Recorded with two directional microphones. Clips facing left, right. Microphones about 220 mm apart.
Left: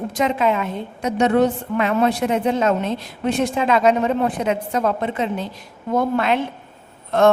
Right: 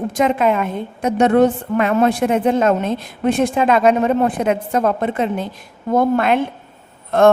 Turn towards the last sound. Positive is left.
turn(degrees=-50)  # may be behind; listen again after turning